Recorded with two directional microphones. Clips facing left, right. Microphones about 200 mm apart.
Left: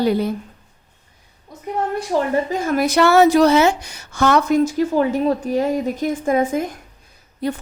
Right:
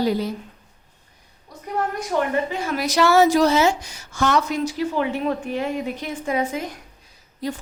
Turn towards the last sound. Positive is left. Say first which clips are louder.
# left 5 dB
turn(degrees=60)  # may be behind; listen again after turning